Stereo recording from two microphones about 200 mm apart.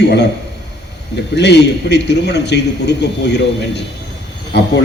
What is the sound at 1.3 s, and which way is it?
A man's voice, 60° left (ahead or behind).